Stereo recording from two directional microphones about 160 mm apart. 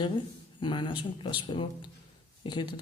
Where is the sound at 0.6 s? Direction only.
30° left (ahead or behind).